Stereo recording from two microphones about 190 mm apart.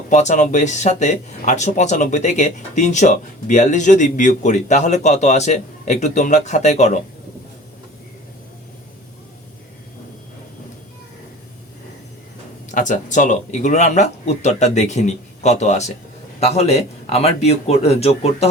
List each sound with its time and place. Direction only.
0.1 s speech: 40° left (ahead or behind)
12.7 s speech: 40° left (ahead or behind)